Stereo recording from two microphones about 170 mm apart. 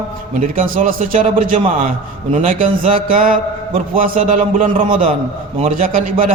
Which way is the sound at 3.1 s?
55° right (ahead or behind).